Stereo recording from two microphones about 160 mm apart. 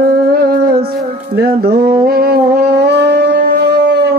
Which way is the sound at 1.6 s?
80° right.